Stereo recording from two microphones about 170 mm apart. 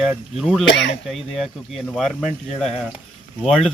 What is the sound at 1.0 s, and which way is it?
Speech, centre (ahead or behind).